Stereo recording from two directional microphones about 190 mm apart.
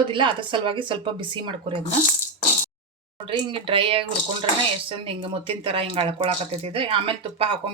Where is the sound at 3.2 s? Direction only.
30° right (ahead or behind).